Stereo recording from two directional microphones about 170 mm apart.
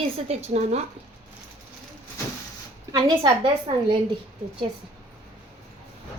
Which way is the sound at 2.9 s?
25° right (ahead or behind).